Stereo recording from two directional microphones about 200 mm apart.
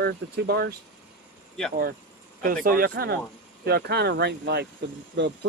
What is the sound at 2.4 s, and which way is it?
Speech, 45° right (ahead or behind).